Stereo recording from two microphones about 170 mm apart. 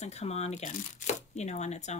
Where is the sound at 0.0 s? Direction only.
40° left (ahead or behind).